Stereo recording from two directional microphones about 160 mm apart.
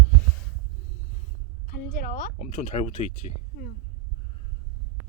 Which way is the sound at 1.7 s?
65° left (ahead or behind).